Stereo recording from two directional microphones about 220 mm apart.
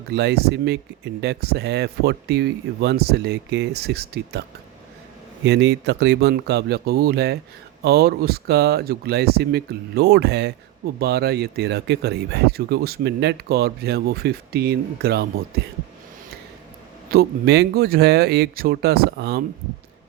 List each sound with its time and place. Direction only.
0.1 s speech: 50° right (ahead or behind)
5.5 s speech: 50° right (ahead or behind)
17.1 s speech: 45° right (ahead or behind)